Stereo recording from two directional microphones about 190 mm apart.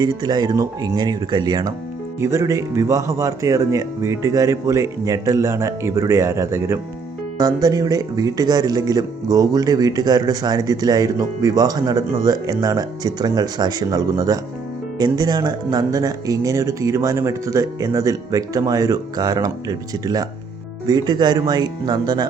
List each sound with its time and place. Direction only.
0.0 s speech: 20° right (ahead or behind)